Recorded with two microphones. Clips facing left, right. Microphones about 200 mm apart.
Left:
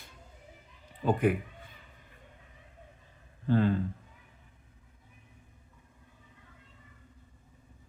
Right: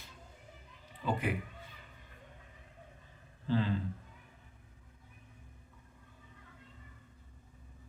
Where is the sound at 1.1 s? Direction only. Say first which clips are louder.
Left 8 dB; 50° left (ahead or behind).